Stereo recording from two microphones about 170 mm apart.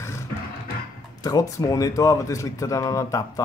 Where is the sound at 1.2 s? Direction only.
20° left (ahead or behind).